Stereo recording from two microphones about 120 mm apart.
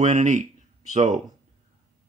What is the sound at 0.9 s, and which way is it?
Speech, 75° right (ahead or behind).